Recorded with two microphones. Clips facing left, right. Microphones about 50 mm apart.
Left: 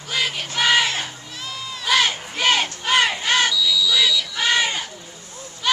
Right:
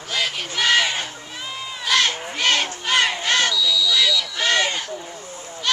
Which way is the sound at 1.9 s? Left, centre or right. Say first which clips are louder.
Left 1 dB; centre.